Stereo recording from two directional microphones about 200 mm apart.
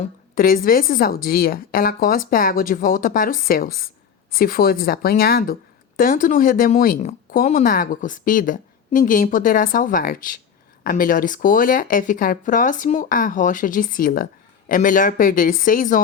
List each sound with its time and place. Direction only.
0.0 s speech: 45° left (ahead or behind)